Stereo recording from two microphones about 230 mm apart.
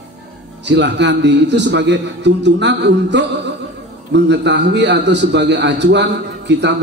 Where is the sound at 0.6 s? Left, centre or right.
Right.